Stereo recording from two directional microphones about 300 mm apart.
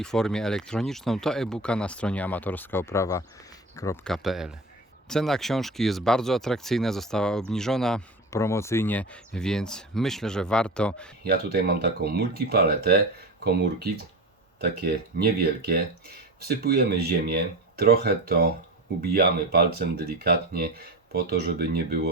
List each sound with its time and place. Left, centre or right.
0.0 s speech: centre
11.2 s speech: right
14.8 s speech: right